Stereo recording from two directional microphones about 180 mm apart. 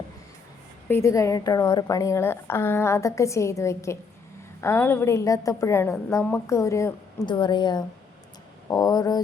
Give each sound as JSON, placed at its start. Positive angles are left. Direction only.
{"t": 0.9, "sound": "a woman's voice", "side_deg": 15}